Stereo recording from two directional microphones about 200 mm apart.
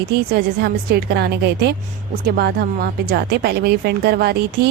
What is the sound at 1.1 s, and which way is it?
A woman's voice, 55° right (ahead or behind).